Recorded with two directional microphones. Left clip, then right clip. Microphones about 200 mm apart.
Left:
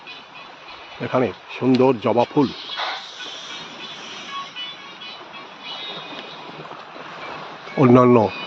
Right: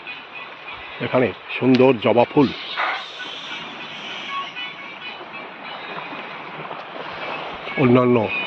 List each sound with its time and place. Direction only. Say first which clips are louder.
1.0 s speech: right 1 dB; 5° left (ahead or behind)
2.7 s a sound: right 4 dB; 15° left (ahead or behind)
7.8 s speech: left 3 dB; 20° left (ahead or behind)